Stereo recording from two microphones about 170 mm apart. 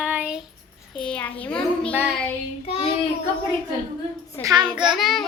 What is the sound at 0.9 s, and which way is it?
Speech, 5° left (ahead or behind).